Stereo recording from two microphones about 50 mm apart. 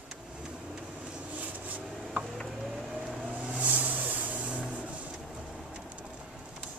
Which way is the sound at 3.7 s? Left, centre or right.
Right.